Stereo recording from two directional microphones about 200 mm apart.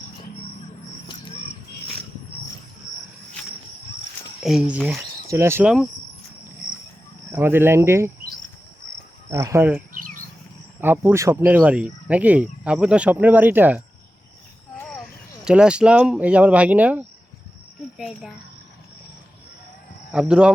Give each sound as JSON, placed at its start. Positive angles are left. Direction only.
{"t": 1.0, "sound": "a sound", "side_deg": 25}
{"t": 4.4, "sound": "speech", "side_deg": -5}
{"t": 5.3, "sound": "speech", "side_deg": -15}
{"t": 7.3, "sound": "speech", "side_deg": -10}
{"t": 9.3, "sound": "speech", "side_deg": -15}
{"t": 15.4, "sound": "speech", "side_deg": -5}
{"t": 20.1, "sound": "speech", "side_deg": -5}